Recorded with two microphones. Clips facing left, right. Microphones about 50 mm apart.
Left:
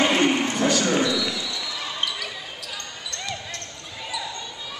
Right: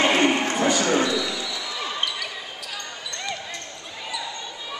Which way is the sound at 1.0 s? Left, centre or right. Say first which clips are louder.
Even; centre.